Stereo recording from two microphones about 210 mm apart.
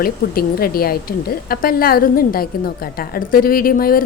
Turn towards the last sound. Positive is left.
turn(degrees=40)  # may be behind; listen again after turning